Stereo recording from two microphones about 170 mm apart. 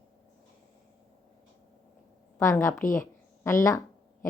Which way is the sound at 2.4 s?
15° left (ahead or behind).